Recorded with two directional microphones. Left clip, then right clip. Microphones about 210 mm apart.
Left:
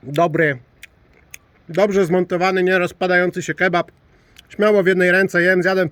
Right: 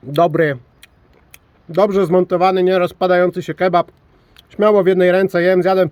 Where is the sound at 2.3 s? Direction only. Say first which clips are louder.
Right 2 dB; 15° left (ahead or behind).